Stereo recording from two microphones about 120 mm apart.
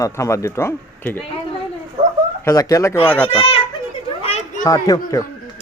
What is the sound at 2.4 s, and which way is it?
Speech, 25° left (ahead or behind).